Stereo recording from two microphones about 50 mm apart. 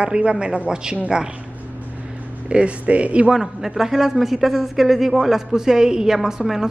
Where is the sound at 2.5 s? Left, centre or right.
Right.